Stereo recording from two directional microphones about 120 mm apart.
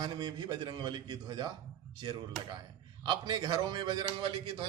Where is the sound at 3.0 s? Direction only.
40° right (ahead or behind).